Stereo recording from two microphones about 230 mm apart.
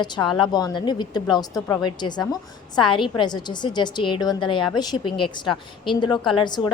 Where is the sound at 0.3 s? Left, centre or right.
Centre.